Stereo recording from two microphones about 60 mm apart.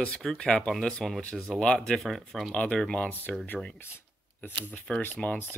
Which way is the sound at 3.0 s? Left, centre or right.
Left.